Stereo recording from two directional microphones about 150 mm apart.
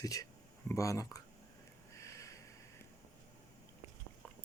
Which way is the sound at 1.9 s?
20° left (ahead or behind).